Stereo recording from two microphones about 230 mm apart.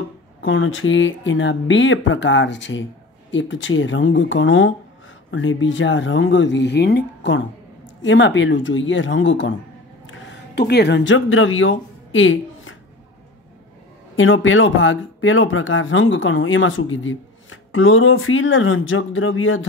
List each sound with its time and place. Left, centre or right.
0.4 s speech: left
14.1 s speech: left